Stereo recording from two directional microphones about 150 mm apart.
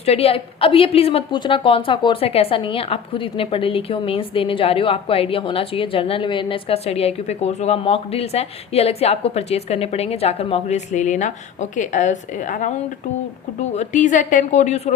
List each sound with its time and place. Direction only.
0.0 s a woman's voice: 40° left (ahead or behind)